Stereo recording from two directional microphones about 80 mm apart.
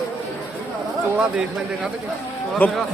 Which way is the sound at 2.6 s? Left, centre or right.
Left.